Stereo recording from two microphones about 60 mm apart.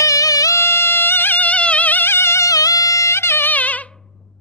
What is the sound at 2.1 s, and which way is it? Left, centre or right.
Music, left.